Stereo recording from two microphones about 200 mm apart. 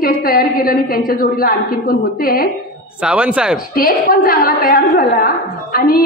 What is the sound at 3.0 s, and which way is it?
Speech, 5° right (ahead or behind).